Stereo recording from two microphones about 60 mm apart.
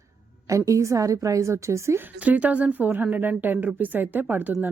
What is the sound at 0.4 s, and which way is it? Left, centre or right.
A woman's voice, right.